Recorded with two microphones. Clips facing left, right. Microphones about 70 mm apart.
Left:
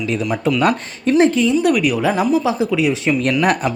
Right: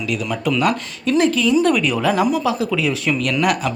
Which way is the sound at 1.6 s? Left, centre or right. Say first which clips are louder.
Left 2 dB; centre.